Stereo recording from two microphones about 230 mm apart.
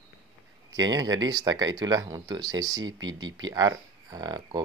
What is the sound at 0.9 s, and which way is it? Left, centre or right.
Speech, centre.